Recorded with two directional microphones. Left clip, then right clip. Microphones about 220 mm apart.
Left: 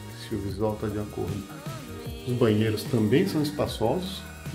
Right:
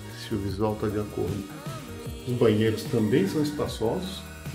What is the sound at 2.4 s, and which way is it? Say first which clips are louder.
Speech: right 2 dB; 15° left (ahead or behind).